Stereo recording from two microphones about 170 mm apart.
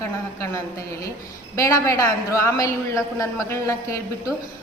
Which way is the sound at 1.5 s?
20° left (ahead or behind).